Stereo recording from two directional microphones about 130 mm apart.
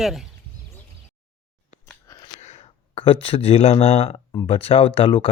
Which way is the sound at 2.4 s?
60° left (ahead or behind).